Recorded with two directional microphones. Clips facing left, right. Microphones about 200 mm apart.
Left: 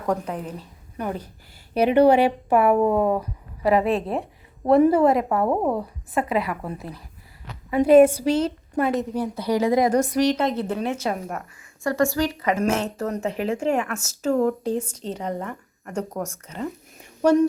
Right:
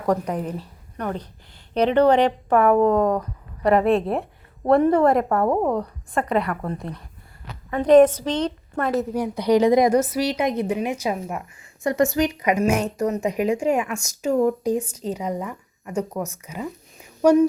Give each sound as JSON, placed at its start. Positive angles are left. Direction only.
{"t": 0.9, "sound": "a woman's voice", "side_deg": 10}
{"t": 8.9, "sound": "speech", "side_deg": -5}
{"t": 9.2, "sound": "speech", "side_deg": -15}
{"t": 10.0, "sound": "speech", "side_deg": -5}
{"t": 11.8, "sound": "speech", "side_deg": -20}